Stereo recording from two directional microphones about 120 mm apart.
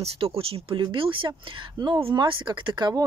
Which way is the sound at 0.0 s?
55° right (ahead or behind).